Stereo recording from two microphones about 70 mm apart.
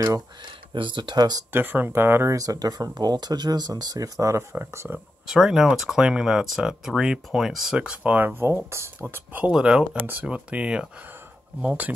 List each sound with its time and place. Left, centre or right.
0.0 s speech: right
1.0 s speech: right
1.5 s speech: right
2.3 s speech: right
4.2 s speech: right
5.2 s speech: centre; by 8.9 s right
9.4 s speech: centre